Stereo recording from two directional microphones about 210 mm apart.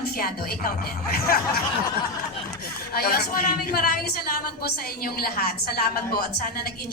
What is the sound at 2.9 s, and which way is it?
A woman's voice, 45° left (ahead or behind).